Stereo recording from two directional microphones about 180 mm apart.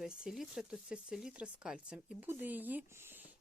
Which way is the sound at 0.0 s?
Centre (ahead or behind).